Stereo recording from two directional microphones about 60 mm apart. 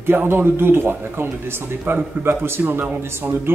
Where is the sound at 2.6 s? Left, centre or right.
Right.